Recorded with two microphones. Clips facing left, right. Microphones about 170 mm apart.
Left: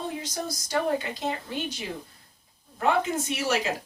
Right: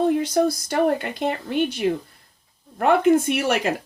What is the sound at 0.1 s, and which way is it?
Speech, 60° right (ahead or behind).